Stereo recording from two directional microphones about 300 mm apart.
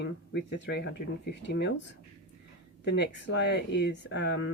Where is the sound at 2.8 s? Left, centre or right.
Left.